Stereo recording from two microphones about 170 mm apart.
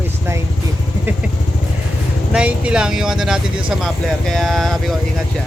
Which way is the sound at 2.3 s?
5° right (ahead or behind).